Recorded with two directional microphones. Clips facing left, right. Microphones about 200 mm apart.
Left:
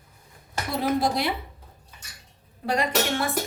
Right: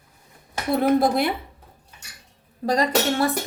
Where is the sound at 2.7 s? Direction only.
35° right (ahead or behind).